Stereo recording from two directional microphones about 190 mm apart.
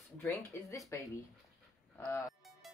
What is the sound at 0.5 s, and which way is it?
Speech, 15° left (ahead or behind).